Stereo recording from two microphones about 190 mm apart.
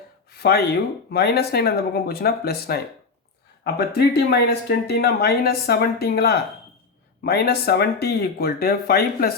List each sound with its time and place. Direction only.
0.3 s speech: 55° left (ahead or behind)